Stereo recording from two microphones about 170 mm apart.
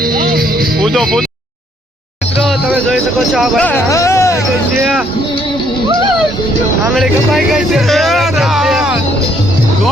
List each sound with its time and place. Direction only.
0.0 s music: 60° right (ahead or behind)
0.8 s speech: centre (ahead or behind)
2.5 s speech: centre (ahead or behind)
3.7 s speech: 15° left (ahead or behind)
6.9 s speech: centre (ahead or behind)